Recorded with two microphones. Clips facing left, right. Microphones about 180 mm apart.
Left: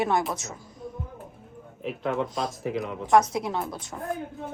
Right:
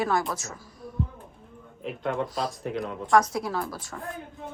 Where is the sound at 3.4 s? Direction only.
20° left (ahead or behind).